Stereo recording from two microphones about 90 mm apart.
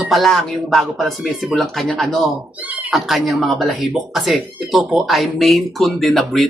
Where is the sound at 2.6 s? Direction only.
15° right (ahead or behind).